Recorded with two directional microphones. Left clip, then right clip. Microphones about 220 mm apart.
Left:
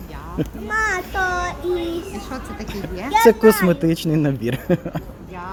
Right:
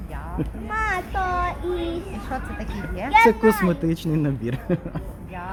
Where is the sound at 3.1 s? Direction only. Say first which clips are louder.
Left 3 dB; 15° left (ahead or behind).